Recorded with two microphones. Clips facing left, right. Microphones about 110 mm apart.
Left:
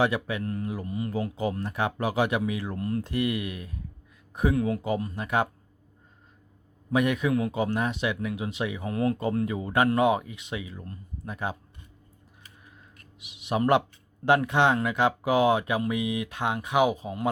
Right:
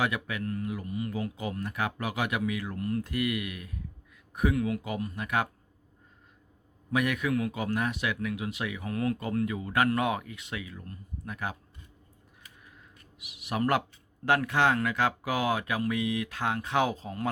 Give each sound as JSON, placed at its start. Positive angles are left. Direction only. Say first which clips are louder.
{"t": 0.0, "sound": "speech", "louder": "left 5 dB", "side_deg": 30}
{"t": 6.9, "sound": "speech", "louder": "left 4 dB", "side_deg": 25}
{"t": 13.1, "sound": "speech", "louder": "left 4 dB", "side_deg": 25}